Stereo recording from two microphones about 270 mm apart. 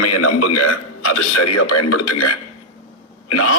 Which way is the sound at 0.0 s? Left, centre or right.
Left.